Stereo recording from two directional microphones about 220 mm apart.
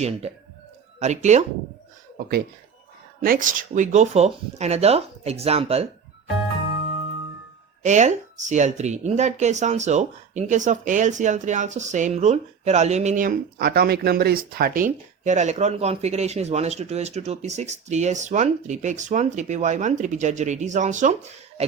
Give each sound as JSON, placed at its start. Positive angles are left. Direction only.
{"t": 0.9, "sound": "speech", "side_deg": -30}
{"t": 3.2, "sound": "speech", "side_deg": -40}
{"t": 7.8, "sound": "speech", "side_deg": -30}